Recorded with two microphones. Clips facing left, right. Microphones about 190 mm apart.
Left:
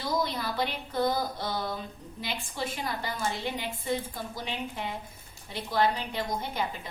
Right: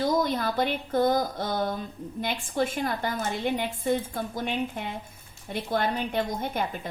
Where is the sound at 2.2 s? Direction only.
50° right (ahead or behind).